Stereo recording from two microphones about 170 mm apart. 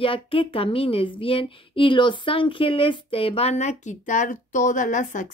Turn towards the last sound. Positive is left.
turn(degrees=45)  # may be behind; listen again after turning